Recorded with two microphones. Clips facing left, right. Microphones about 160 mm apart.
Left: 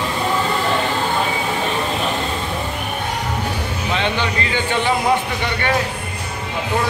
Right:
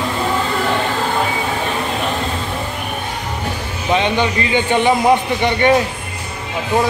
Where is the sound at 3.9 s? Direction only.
15° right (ahead or behind).